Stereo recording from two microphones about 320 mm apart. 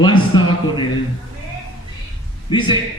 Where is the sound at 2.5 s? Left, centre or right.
Centre.